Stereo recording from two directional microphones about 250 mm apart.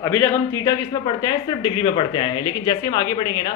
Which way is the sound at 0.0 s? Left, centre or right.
Centre.